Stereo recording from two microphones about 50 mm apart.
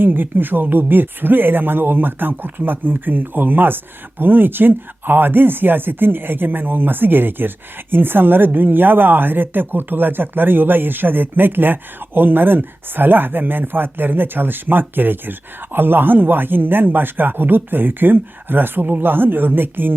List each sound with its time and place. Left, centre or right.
0.0 s speech: right